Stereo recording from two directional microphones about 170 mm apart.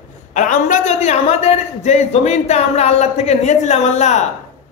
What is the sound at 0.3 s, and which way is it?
A man's voice, 45° left (ahead or behind).